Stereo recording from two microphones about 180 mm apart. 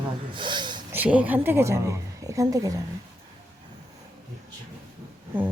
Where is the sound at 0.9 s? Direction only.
10° right (ahead or behind).